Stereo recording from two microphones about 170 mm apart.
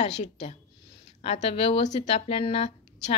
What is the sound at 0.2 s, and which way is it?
A woman's voice, 40° left (ahead or behind).